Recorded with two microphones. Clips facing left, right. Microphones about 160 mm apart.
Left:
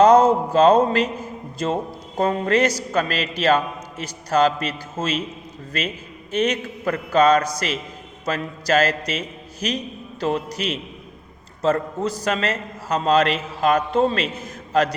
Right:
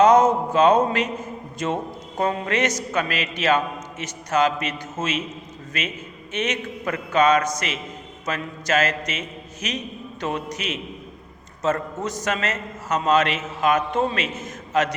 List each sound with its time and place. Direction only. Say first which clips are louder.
0.0 s a man's voice: left 2 dB; 30° left (ahead or behind)
6.3 s a man's voice: left 5 dB; 35° left (ahead or behind)